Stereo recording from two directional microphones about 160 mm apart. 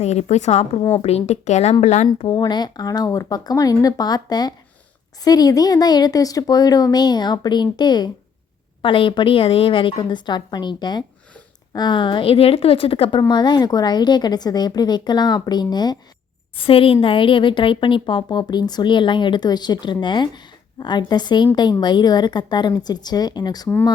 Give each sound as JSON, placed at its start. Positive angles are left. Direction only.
{"t": 0.0, "sound": "speech", "side_deg": 45}
{"t": 2.2, "sound": "a woman's voice", "side_deg": 25}